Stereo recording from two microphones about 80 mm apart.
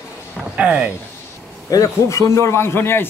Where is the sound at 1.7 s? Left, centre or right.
Left.